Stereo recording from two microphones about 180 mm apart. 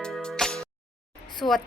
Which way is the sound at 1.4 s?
25° left (ahead or behind).